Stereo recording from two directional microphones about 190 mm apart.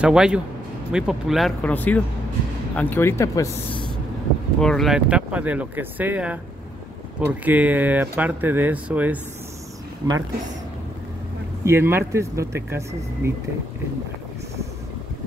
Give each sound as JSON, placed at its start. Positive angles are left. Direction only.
{"t": 0.0, "sound": "speech", "side_deg": -5}
{"t": 4.6, "sound": "speech", "side_deg": 0}
{"t": 11.6, "sound": "speech", "side_deg": -15}